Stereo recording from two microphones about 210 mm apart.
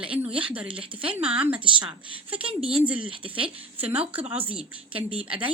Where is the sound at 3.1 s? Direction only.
25° right (ahead or behind).